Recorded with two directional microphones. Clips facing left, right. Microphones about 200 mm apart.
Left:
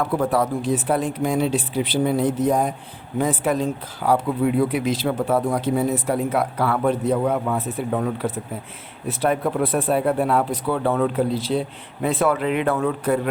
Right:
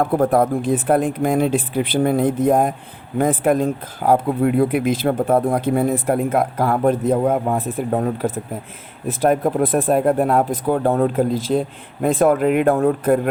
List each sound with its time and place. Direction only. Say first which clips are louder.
0.0 s speech: right 4 dB; 50° right (ahead or behind)